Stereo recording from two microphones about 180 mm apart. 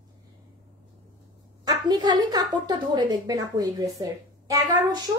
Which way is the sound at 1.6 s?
20° right (ahead or behind).